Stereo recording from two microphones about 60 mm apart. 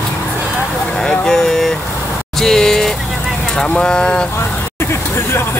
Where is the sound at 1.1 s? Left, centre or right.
Centre.